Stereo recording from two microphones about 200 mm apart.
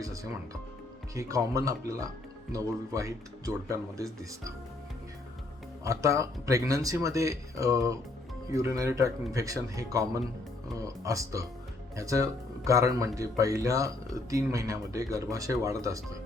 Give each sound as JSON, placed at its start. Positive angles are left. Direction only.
{"t": 1.1, "sound": "speech", "side_deg": -15}
{"t": 5.8, "sound": "speech", "side_deg": -15}